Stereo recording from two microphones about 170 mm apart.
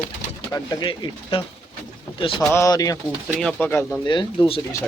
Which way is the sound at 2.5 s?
20° left (ahead or behind).